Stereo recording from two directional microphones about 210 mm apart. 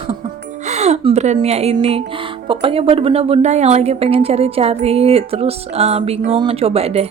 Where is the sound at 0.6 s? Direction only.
30° right (ahead or behind).